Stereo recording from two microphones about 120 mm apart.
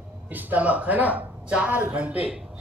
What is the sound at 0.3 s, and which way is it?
Speech, 15° right (ahead or behind).